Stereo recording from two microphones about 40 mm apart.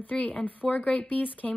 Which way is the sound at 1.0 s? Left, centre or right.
Left.